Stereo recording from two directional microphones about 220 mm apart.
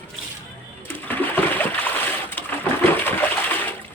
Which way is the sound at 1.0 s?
10° left (ahead or behind).